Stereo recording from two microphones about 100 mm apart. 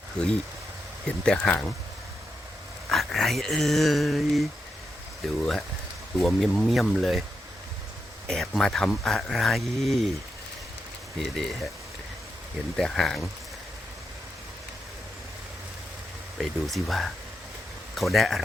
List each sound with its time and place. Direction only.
0.2 s speech: 10° left (ahead or behind)
2.9 s speech: centre (ahead or behind)
8.3 s speech: 5° left (ahead or behind)
12.7 s speech: 5° left (ahead or behind)
16.4 s speech: centre (ahead or behind)